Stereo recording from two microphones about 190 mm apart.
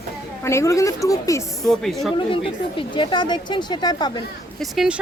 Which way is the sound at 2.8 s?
25° left (ahead or behind).